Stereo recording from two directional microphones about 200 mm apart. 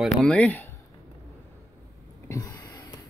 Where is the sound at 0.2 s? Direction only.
5° left (ahead or behind).